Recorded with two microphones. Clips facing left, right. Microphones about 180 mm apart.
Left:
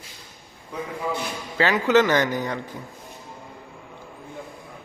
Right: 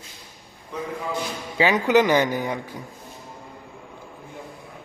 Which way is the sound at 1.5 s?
15° right (ahead or behind).